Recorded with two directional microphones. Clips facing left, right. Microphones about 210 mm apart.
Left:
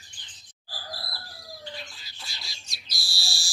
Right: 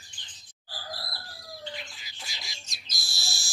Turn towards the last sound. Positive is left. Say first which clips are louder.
# left 1 dB
turn(degrees=-20)  # may be behind; listen again after turning